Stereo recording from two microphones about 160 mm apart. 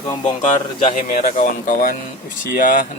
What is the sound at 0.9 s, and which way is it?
Speech, 60° left (ahead or behind).